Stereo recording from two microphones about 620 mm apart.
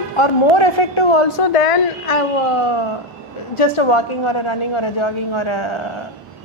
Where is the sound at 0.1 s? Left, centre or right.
Left.